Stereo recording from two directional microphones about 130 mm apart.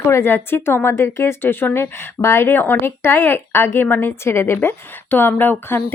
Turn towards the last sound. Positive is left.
turn(degrees=15)  # may be behind; listen again after turning